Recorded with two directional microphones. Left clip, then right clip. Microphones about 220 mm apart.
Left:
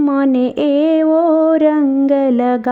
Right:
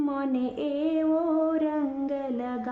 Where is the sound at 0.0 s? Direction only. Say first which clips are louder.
Left 14 dB; 40° left (ahead or behind).